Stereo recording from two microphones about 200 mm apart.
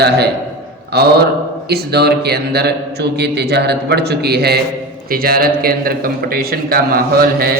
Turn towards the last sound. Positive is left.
turn(degrees=-50)  # may be behind; listen again after turning